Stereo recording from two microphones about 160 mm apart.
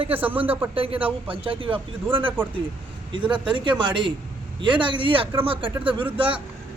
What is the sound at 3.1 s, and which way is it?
Speech, 30° right (ahead or behind).